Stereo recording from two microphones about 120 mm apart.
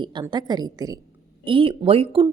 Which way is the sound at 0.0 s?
40° right (ahead or behind).